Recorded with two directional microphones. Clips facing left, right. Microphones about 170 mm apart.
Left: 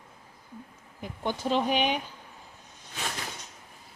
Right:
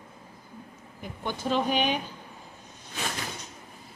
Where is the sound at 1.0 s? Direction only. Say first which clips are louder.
Left 2 dB; 25° left (ahead or behind).